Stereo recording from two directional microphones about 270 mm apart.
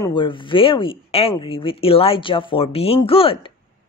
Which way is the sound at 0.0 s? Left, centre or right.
Centre.